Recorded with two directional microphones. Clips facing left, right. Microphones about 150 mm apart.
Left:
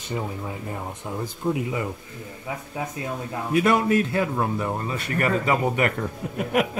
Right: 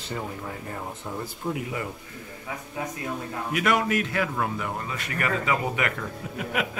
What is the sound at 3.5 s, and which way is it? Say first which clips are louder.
A man's voice: left 5 dB; 30° left (ahead or behind).